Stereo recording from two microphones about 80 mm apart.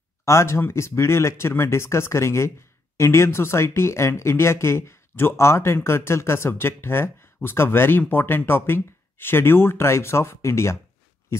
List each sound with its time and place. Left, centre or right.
0.2 s speech: left